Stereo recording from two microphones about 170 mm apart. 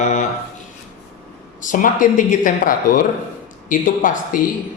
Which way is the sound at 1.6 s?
50° left (ahead or behind).